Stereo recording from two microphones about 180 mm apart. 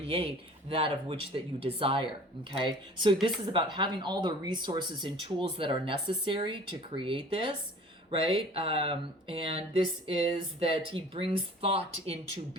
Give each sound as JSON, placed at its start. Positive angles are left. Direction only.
{"t": 0.0, "sound": "speech", "side_deg": -30}